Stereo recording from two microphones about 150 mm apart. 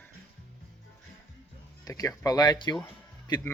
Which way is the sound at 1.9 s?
25° left (ahead or behind).